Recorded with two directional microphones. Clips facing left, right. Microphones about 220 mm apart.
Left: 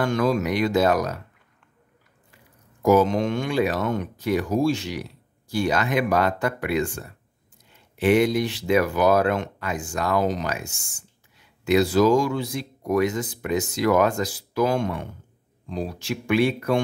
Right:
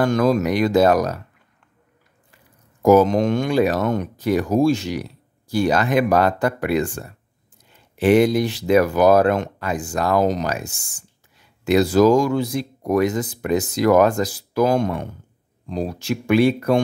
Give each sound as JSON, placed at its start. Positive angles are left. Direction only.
{"t": 0.0, "sound": "speech", "side_deg": -40}
{"t": 2.8, "sound": "speech", "side_deg": -45}